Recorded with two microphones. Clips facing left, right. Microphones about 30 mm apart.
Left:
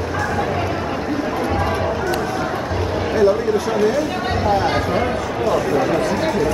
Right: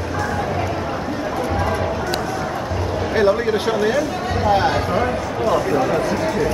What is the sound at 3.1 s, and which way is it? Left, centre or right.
Speech, right.